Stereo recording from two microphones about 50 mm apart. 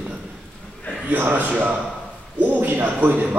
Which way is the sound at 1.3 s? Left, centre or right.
Right.